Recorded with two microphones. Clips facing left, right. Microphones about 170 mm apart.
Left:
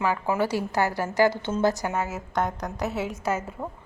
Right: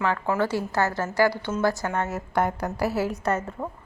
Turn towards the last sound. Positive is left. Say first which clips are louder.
# right 2 dB
turn(degrees=0)  # may be behind; listen again after turning